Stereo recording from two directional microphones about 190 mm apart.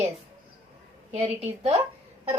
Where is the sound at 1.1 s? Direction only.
35° right (ahead or behind).